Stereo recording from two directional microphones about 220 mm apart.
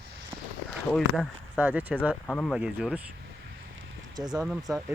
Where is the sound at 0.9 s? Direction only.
Centre (ahead or behind).